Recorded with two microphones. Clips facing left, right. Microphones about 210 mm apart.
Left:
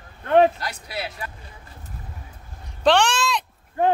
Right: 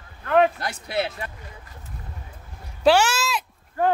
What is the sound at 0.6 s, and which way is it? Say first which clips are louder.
Speech: right 5 dB; 25° right (ahead or behind).